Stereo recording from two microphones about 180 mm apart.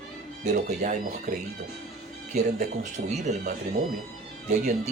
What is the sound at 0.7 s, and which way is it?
Speech, 40° right (ahead or behind).